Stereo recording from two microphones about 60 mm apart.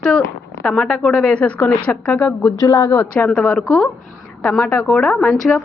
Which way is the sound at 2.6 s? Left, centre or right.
Left.